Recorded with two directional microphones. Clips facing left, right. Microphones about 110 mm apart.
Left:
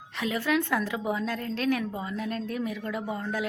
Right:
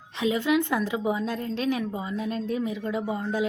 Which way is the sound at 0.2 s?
20° right (ahead or behind).